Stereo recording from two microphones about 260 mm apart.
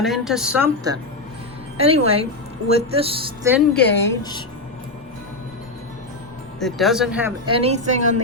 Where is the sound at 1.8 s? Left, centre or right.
Right.